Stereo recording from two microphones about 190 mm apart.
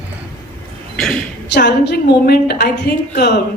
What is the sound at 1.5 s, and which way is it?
A woman's voice, 65° left (ahead or behind).